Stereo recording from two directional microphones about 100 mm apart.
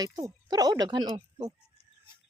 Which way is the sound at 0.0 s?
40° right (ahead or behind).